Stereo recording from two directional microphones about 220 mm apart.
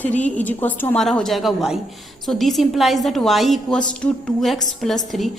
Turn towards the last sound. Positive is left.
turn(degrees=0)  # may be behind; listen again after turning